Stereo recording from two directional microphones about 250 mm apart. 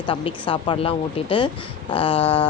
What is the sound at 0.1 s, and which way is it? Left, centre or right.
Speech, centre.